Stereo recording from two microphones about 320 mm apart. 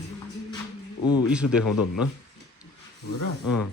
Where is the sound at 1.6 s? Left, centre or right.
Left.